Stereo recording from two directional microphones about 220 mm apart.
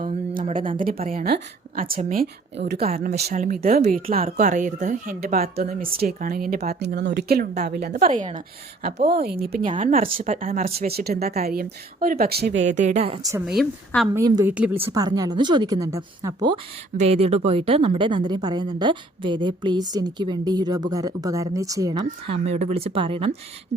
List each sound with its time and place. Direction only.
0.0 s a sound: 35° right (ahead or behind)
0.9 s a woman's voice: 25° right (ahead or behind)
1.2 s a woman's voice: 40° right (ahead or behind)
2.9 s speech: 35° right (ahead or behind)
5.5 s speech: 30° right (ahead or behind)
5.9 s a woman's voice: 45° right (ahead or behind)
9.6 s a woman's voice: 25° right (ahead or behind)
10.2 s a woman's voice: 35° right (ahead or behind)
12.5 s speech: 35° right (ahead or behind)
13.4 s a woman's voice: centre (ahead or behind)
14.2 s a woman's voice: 15° right (ahead or behind)
22.0 s a woman's voice: 30° right (ahead or behind)